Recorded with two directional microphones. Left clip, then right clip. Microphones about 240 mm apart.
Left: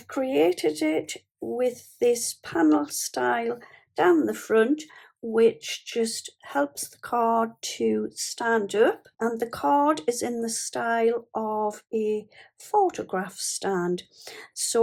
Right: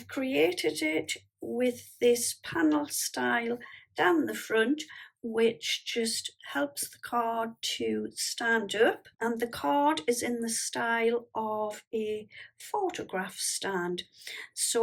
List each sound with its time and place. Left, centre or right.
0.2 s speech: centre